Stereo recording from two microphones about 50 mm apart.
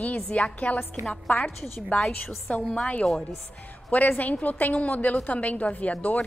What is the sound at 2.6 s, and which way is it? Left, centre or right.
Speech, centre.